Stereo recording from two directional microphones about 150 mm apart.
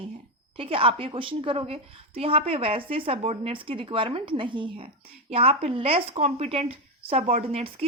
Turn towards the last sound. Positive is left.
turn(degrees=-40)  # may be behind; listen again after turning